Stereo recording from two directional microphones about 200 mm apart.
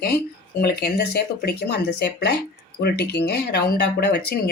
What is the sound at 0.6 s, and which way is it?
Speech, 55° left (ahead or behind).